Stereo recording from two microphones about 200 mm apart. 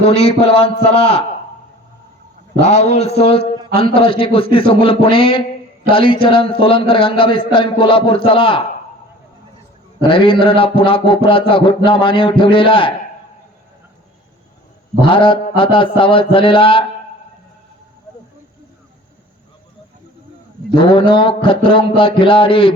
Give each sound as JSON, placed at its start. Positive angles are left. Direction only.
{"t": 0.0, "sound": "a man's voice", "side_deg": 30}
{"t": 2.6, "sound": "a man's voice", "side_deg": 35}
{"t": 3.8, "sound": "music", "side_deg": 25}
{"t": 10.0, "sound": "music", "side_deg": 25}
{"t": 15.0, "sound": "music", "side_deg": 25}
{"t": 20.7, "sound": "music", "side_deg": 25}